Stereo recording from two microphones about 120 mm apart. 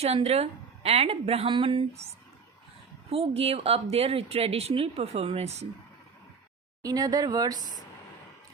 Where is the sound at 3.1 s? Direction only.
55° right (ahead or behind).